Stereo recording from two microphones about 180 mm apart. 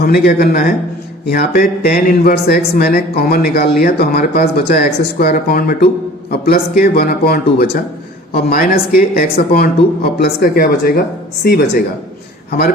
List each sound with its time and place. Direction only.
0.0 s speech: 55° left (ahead or behind)